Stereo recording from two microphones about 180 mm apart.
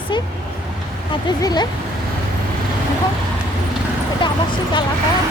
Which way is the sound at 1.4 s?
20° left (ahead or behind).